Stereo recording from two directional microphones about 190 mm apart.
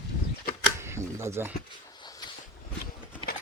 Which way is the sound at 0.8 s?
15° right (ahead or behind).